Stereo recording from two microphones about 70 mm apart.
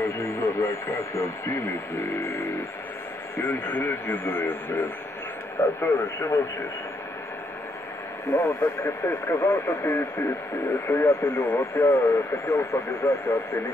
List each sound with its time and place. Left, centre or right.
0.0 s speech: left
5.8 s speech: left
8.3 s speech: left